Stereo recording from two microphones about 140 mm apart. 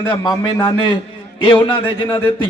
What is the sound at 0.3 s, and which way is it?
A man's voice, 30° left (ahead or behind).